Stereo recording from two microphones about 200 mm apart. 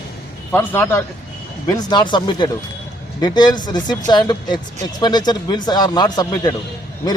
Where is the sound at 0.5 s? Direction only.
10° left (ahead or behind).